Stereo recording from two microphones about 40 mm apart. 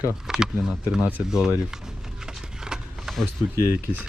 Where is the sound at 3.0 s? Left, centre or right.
Centre.